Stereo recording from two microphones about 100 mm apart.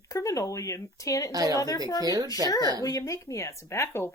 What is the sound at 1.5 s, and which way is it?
Speech, 40° left (ahead or behind).